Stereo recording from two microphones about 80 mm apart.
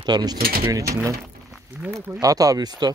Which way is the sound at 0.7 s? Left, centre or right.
Right.